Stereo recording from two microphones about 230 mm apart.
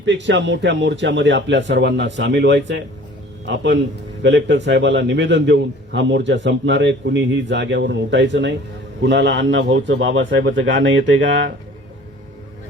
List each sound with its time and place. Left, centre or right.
0.0 s a man's voice: right